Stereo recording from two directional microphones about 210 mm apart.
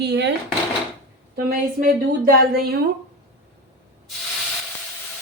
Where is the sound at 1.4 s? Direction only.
45° right (ahead or behind).